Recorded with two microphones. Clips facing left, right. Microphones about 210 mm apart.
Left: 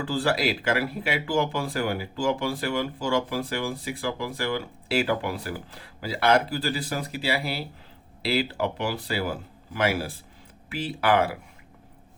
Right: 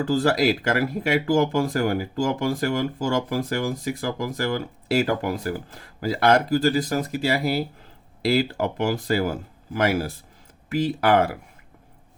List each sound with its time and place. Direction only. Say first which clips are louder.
0.0 s speech: right 5 dB; 40° right (ahead or behind)